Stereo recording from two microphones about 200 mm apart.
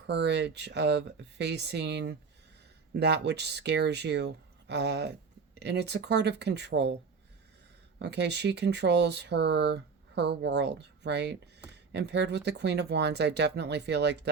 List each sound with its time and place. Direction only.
0.1 s speech: 60° right (ahead or behind)
7.9 s speech: 60° right (ahead or behind)